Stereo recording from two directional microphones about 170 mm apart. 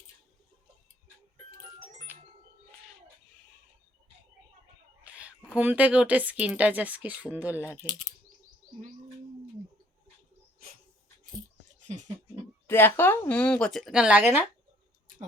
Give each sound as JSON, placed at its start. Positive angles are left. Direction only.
{"t": 5.0, "sound": "speech", "side_deg": -10}
{"t": 11.9, "sound": "a sound", "side_deg": -45}
{"t": 12.6, "sound": "speech", "side_deg": 15}